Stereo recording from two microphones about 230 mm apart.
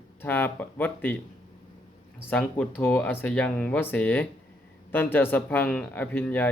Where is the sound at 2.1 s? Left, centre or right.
Centre.